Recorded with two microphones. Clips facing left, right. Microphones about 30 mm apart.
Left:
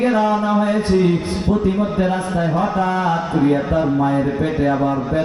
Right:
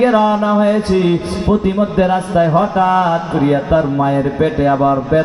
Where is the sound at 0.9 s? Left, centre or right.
Right.